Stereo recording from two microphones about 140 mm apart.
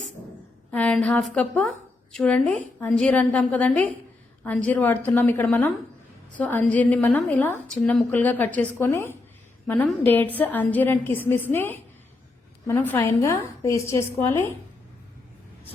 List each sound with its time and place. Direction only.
0.7 s a woman's voice: 10° left (ahead or behind)
12.8 s a woman's voice: 15° left (ahead or behind)